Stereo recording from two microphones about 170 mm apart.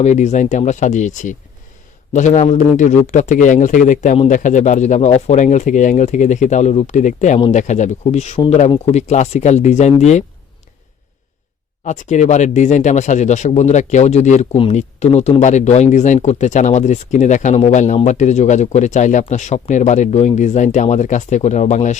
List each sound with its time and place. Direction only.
0.0 s speech: 45° left (ahead or behind)
11.9 s speech: 45° left (ahead or behind)